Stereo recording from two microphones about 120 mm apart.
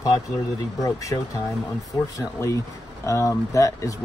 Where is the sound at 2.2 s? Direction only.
25° left (ahead or behind).